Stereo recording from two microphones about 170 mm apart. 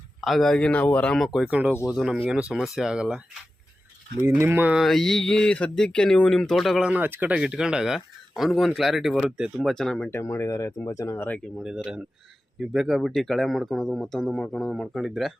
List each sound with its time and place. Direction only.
0.2 s speech: centre (ahead or behind)
4.2 s speech: 15° right (ahead or behind); by 10.1 s 5° left (ahead or behind)
10.1 s speech: 15° left (ahead or behind)
11.6 s speech: 5° right (ahead or behind)